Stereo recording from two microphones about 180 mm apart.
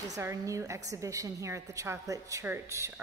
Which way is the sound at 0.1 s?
15° right (ahead or behind).